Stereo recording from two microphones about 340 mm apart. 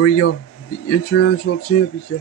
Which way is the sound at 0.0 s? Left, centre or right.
Left.